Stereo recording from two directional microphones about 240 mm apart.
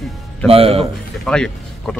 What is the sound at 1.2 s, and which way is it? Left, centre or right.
Speech, centre.